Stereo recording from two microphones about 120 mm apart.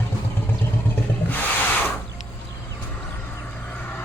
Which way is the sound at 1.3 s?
15° left (ahead or behind).